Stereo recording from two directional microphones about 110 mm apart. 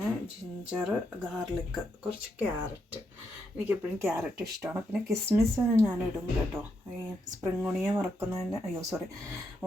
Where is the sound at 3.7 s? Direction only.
20° right (ahead or behind).